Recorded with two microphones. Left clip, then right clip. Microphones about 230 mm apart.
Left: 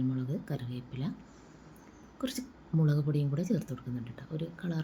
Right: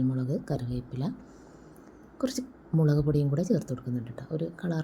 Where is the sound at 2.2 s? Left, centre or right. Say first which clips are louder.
Right 6 dB; centre.